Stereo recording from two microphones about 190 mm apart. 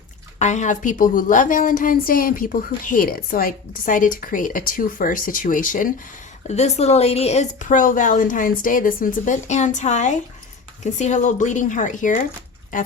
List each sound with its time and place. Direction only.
0.3 s a woman's voice: 40° left (ahead or behind)
6.5 s speech: 35° left (ahead or behind)